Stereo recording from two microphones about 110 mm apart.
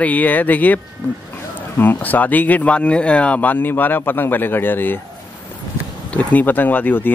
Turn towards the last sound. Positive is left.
turn(degrees=15)  # may be behind; listen again after turning